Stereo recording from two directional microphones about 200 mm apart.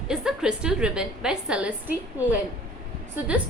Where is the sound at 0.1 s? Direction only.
5° right (ahead or behind).